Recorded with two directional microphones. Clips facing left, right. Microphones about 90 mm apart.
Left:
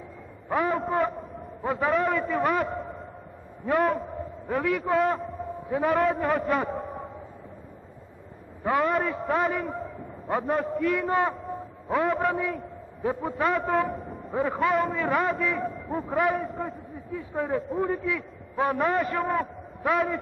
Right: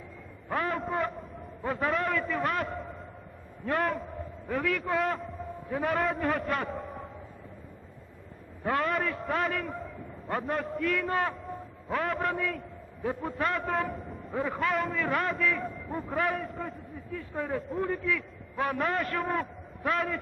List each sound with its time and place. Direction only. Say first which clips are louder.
0.4 s a man's voice: left 5 dB; 10° left (ahead or behind)
4.1 s a sound: left 4 dB; 15° left (ahead or behind)
4.7 s a man's voice: left 6 dB; centre (ahead or behind)
8.8 s a man's voice: left 4 dB; centre (ahead or behind)